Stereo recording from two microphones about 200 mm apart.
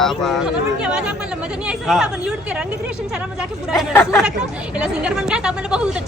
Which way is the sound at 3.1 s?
5° right (ahead or behind).